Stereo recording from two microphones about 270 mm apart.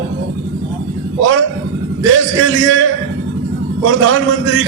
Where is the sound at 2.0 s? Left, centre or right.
Right.